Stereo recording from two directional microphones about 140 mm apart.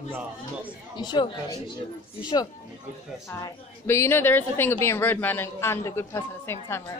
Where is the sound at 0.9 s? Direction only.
30° left (ahead or behind).